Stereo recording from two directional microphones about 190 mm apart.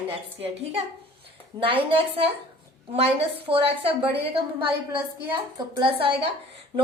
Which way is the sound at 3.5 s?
30° right (ahead or behind).